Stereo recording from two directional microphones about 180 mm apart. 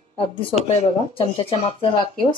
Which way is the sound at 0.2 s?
30° left (ahead or behind).